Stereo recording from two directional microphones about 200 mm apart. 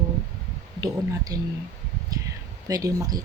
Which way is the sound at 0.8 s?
20° right (ahead or behind).